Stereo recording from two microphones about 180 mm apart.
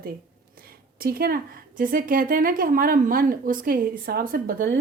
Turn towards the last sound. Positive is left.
turn(degrees=-55)  # may be behind; listen again after turning